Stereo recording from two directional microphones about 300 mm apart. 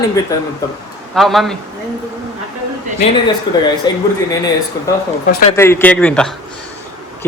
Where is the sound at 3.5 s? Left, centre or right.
Centre.